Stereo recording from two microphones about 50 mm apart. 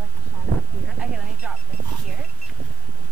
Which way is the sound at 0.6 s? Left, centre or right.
Centre.